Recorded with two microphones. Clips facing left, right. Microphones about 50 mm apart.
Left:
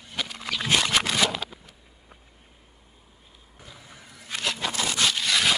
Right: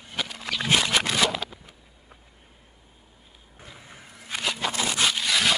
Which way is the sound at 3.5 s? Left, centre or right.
Right.